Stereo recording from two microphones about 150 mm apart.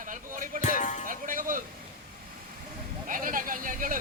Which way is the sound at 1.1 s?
65° right (ahead or behind).